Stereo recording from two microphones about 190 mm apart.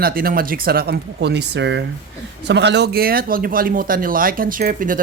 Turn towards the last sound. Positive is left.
turn(degrees=-45)  # may be behind; listen again after turning